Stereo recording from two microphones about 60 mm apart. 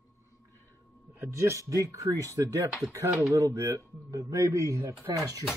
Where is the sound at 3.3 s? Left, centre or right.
Right.